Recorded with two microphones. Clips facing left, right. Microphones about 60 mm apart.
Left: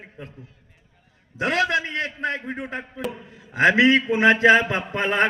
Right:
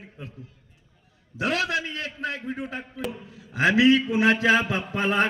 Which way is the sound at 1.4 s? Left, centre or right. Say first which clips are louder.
Left 4 dB; left.